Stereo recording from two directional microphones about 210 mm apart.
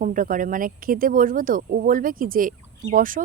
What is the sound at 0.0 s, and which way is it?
Speech, 40° right (ahead or behind).